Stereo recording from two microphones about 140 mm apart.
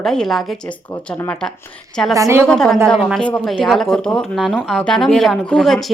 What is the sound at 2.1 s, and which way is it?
Speech, 20° right (ahead or behind).